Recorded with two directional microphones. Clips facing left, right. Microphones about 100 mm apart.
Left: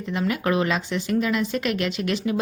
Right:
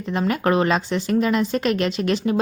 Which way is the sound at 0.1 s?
40° right (ahead or behind).